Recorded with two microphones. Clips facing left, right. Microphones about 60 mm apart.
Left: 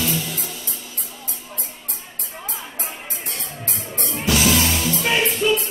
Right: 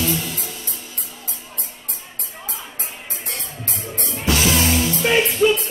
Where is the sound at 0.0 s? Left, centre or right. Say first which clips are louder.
Right 1 dB; right.